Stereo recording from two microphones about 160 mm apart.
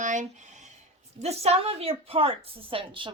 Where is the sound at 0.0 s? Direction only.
50° right (ahead or behind).